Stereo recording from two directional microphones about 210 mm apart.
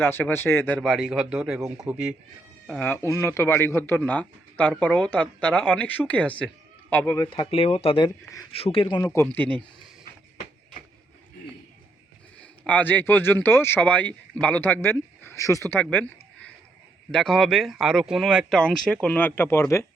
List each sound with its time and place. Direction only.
0.0 s speech: 10° left (ahead or behind)
2.6 s a man's voice: 5° left (ahead or behind)
7.3 s a man's voice: 25° left (ahead or behind); by 9.6 s 5° left (ahead or behind)
12.4 s a man's voice: 5° left (ahead or behind)